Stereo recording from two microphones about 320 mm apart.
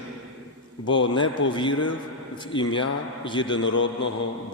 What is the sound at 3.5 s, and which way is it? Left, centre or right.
Speech, left.